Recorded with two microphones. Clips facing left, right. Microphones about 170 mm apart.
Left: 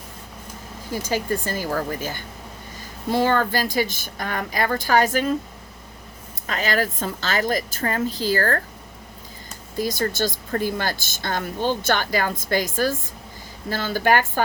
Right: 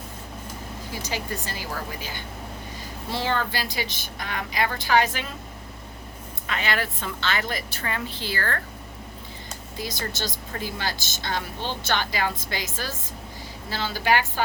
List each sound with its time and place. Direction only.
1.0 s speech: 45° left (ahead or behind)
6.5 s a woman's voice: 40° left (ahead or behind)
9.7 s speech: 50° left (ahead or behind)